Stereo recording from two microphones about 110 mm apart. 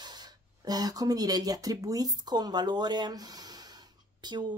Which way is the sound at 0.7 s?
35° right (ahead or behind).